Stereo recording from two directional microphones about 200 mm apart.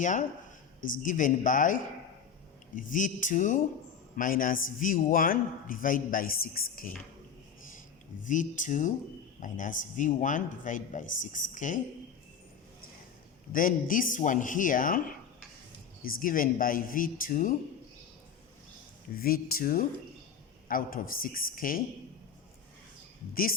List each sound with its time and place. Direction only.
0.0 s speech: 40° left (ahead or behind)
2.9 s a man's voice: 40° left (ahead or behind)
8.2 s speech: 40° left (ahead or behind)
13.5 s a man's voice: 45° left (ahead or behind)
19.1 s a man's voice: 50° left (ahead or behind)
23.3 s a man's voice: 45° left (ahead or behind)